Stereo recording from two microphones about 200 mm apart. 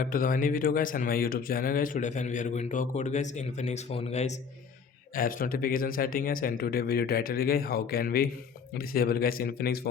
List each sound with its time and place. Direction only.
0.0 s speech: 45° left (ahead or behind)
5.1 s a man's voice: 45° left (ahead or behind)